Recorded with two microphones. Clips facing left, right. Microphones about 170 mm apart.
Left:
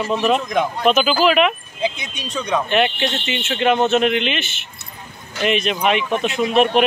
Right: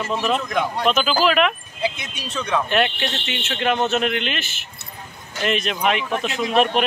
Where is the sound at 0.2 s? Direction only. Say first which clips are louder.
Left 3 dB; 15° left (ahead or behind).